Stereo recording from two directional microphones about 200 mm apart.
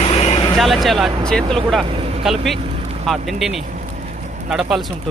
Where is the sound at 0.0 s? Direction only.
30° left (ahead or behind).